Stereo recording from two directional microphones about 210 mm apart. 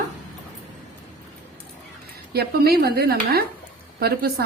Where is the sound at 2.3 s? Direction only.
50° right (ahead or behind).